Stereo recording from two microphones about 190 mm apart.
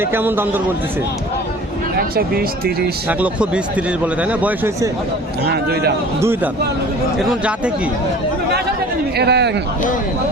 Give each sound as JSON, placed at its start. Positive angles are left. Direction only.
{"t": 0.0, "sound": "speech", "side_deg": -10}
{"t": 2.0, "sound": "speech", "side_deg": -55}
{"t": 3.1, "sound": "speech", "side_deg": -5}
{"t": 5.5, "sound": "a man's voice", "side_deg": -55}
{"t": 6.1, "sound": "speech", "side_deg": -15}
{"t": 9.1, "sound": "a man's voice", "side_deg": -60}